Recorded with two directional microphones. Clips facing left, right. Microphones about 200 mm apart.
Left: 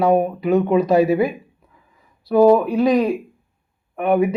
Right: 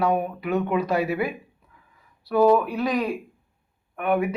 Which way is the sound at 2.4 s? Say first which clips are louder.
Left 6 dB; 20° left (ahead or behind).